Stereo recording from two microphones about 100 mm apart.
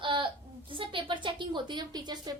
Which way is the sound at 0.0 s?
55° right (ahead or behind).